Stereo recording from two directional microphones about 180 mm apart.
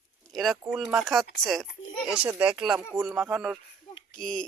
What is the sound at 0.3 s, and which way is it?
Speech, centre (ahead or behind).